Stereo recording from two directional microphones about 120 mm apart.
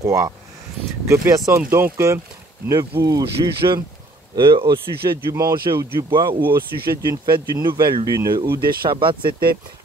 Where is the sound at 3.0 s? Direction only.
30° right (ahead or behind).